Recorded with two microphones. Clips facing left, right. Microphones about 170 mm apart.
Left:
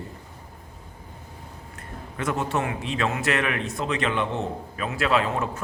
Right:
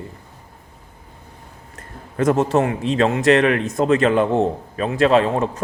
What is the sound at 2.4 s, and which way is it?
A man's voice, 35° right (ahead or behind).